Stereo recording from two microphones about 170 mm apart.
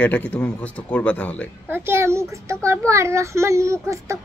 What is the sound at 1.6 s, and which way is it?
A child's voice, 15° right (ahead or behind).